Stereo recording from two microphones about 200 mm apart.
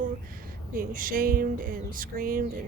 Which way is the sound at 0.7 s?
45° right (ahead or behind).